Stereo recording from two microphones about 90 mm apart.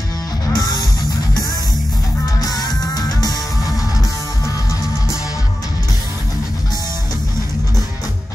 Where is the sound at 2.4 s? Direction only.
45° left (ahead or behind).